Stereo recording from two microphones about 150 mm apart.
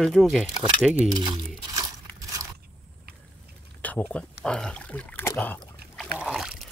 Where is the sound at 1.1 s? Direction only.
30° right (ahead or behind).